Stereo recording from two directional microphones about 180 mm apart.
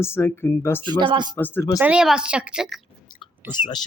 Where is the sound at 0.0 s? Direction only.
15° left (ahead or behind).